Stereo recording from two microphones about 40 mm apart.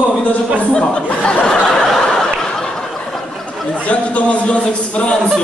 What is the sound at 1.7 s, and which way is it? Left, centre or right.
Snicker, centre.